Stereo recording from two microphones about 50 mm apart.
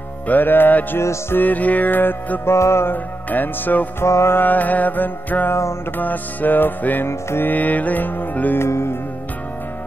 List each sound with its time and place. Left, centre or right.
0.3 s music: left
2.4 s music: left
2.9 s music: left
4.0 s music: left
4.4 s music: left
5.5 s music: left
5.9 s music: left
7.1 s music: left
7.4 s music: left
8.5 s music: left